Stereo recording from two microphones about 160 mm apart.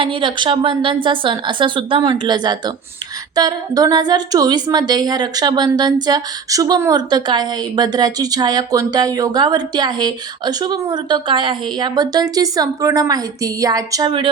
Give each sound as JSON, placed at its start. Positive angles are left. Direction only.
{"t": 0.0, "sound": "a woman's voice", "side_deg": -30}